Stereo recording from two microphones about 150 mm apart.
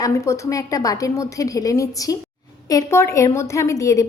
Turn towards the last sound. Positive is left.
turn(degrees=20)  # may be behind; listen again after turning